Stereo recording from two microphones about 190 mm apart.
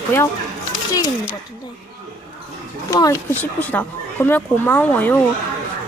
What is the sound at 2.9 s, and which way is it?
Speech, 20° left (ahead or behind).